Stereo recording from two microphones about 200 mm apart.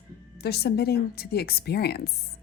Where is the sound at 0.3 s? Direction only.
50° left (ahead or behind).